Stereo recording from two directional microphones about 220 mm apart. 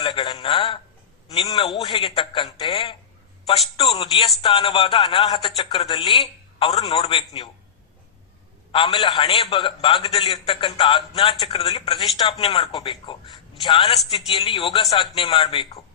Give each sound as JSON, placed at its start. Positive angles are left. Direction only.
{"t": 0.0, "sound": "speech", "side_deg": 20}
{"t": 3.9, "sound": "speech", "side_deg": 25}
{"t": 8.7, "sound": "speech", "side_deg": 20}